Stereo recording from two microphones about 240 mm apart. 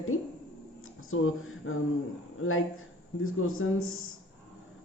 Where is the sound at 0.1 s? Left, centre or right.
Left.